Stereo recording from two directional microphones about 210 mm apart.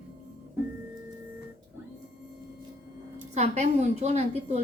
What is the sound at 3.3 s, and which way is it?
A woman's voice, 30° right (ahead or behind).